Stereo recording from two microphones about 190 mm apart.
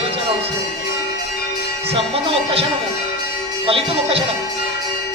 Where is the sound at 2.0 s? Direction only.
30° right (ahead or behind).